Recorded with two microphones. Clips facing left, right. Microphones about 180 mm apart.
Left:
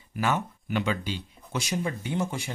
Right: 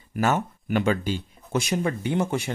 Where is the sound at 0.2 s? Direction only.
45° right (ahead or behind).